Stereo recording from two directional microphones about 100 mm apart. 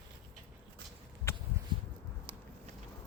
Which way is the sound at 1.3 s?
25° left (ahead or behind).